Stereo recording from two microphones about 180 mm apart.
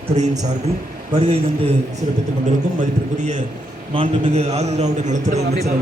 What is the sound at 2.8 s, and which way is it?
A man's voice, 45° right (ahead or behind).